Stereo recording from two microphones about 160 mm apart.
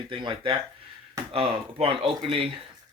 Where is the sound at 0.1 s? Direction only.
30° right (ahead or behind).